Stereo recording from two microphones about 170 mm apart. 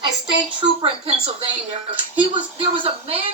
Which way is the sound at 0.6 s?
30° right (ahead or behind).